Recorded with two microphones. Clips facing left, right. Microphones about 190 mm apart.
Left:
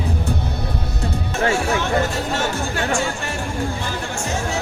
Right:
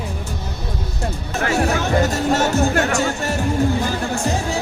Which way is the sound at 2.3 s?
40° right (ahead or behind).